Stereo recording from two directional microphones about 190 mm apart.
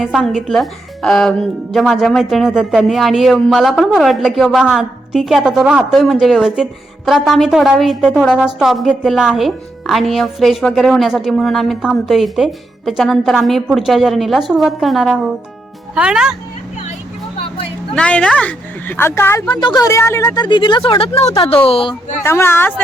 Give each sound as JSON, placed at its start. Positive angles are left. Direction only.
{"t": 0.0, "sound": "speech", "side_deg": 0}
{"t": 17.9, "sound": "speech", "side_deg": 5}
{"t": 22.2, "sound": "speech", "side_deg": 15}